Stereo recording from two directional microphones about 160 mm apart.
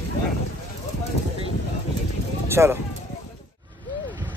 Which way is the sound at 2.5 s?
15° right (ahead or behind).